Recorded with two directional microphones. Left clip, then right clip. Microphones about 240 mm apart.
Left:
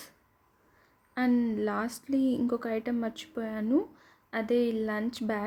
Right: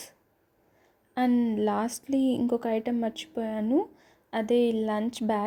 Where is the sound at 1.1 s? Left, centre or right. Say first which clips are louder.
Right 3 dB; centre.